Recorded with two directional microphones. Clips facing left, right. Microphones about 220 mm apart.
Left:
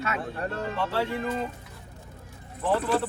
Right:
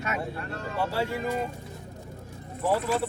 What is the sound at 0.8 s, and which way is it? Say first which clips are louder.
Speech: even; 10° right (ahead or behind).